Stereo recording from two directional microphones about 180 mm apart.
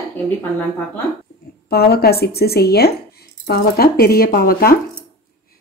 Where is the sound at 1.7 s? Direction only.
60° left (ahead or behind).